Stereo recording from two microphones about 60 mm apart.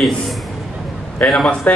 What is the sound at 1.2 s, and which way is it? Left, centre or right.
Speech, centre.